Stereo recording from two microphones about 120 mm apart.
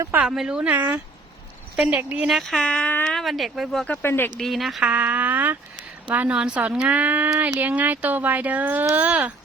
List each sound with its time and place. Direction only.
0.2 s a woman's voice: 5° right (ahead or behind)
3.8 s speech: 15° left (ahead or behind)
4.4 s speech: centre (ahead or behind)
4.9 s a sound: 10° right (ahead or behind)
6.1 s speech: 10° right (ahead or behind)